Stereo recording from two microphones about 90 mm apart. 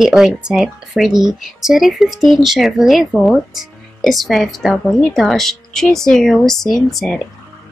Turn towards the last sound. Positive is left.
turn(degrees=0)  # may be behind; listen again after turning